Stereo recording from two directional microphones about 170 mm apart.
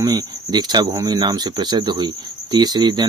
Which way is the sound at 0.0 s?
20° right (ahead or behind).